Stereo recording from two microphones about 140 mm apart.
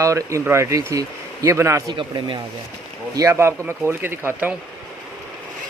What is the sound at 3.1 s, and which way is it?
Speech, 20° right (ahead or behind).